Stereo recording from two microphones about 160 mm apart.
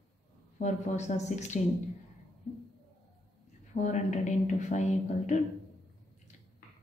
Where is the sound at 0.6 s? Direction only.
45° left (ahead or behind).